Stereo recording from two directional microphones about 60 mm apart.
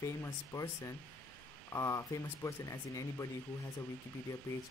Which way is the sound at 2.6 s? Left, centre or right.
Left.